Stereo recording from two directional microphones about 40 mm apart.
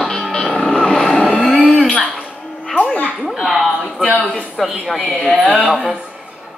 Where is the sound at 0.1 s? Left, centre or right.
Left.